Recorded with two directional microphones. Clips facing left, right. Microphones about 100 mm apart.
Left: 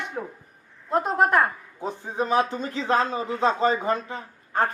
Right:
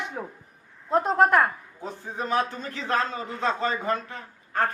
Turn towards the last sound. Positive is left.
turn(degrees=20)  # may be behind; listen again after turning